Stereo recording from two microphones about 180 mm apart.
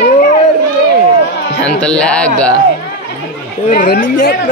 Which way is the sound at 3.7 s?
50° left (ahead or behind).